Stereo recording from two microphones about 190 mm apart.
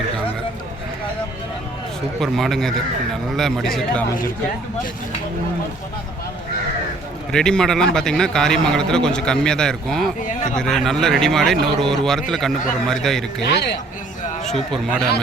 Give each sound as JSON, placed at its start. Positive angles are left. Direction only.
{"t": 2.2, "sound": "a man's voice", "side_deg": 0}
{"t": 7.3, "sound": "a man's voice", "side_deg": 5}
{"t": 13.4, "sound": "a man's voice", "side_deg": 60}